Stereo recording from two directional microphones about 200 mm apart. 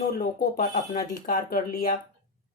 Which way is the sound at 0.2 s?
40° left (ahead or behind).